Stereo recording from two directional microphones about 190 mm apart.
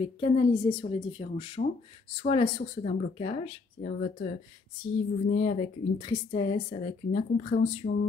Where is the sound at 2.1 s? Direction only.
30° left (ahead or behind).